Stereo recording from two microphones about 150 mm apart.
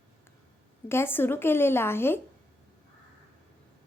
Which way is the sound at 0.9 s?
15° left (ahead or behind).